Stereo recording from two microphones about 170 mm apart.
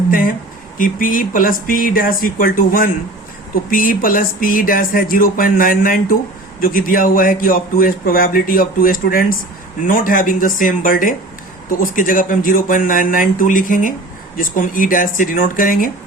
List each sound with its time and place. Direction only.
0.1 s a man's voice: 55° left (ahead or behind)